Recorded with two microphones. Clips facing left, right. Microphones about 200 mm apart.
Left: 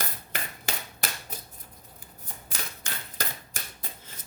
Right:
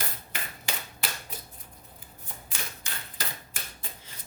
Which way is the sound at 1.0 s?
45° left (ahead or behind).